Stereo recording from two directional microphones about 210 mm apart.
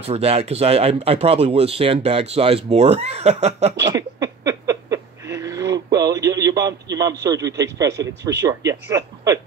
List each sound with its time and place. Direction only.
0.0 s speech: 30° right (ahead or behind)
3.9 s a sound: 15° right (ahead or behind)
7.2 s speech: 15° right (ahead or behind)